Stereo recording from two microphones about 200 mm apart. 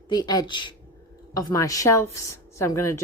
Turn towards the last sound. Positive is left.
turn(degrees=15)  # may be behind; listen again after turning